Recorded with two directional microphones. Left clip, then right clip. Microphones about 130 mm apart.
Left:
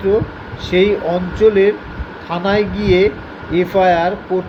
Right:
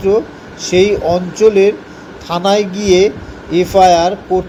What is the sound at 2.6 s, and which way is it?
Speech, 25° left (ahead or behind).